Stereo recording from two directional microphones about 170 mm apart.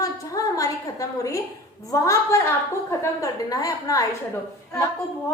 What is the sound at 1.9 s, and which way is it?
A woman's voice, 20° left (ahead or behind).